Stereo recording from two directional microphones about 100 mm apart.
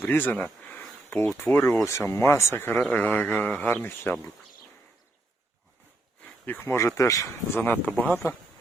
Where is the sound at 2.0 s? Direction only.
25° left (ahead or behind).